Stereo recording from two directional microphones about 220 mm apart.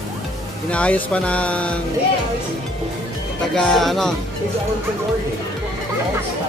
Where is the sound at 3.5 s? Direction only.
Centre (ahead or behind).